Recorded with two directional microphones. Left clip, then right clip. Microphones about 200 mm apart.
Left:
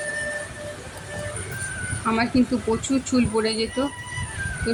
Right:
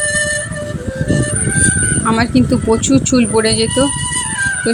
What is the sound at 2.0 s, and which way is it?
Speech, 35° right (ahead or behind).